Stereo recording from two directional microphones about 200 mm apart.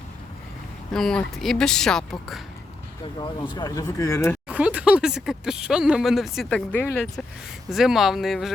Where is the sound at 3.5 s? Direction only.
20° left (ahead or behind).